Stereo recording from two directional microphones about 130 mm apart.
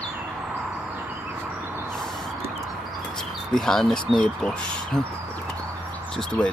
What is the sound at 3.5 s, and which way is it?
Speech, 5° left (ahead or behind).